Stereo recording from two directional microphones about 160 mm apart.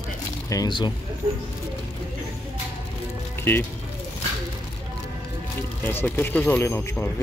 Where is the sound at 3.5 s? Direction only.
10° left (ahead or behind).